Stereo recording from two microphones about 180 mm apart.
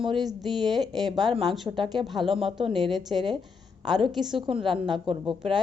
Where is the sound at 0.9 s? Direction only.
20° right (ahead or behind).